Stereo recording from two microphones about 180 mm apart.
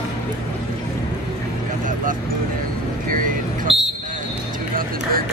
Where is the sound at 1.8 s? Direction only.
50° right (ahead or behind).